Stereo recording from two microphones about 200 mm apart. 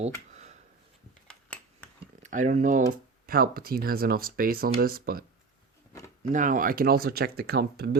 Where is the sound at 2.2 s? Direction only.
40° right (ahead or behind).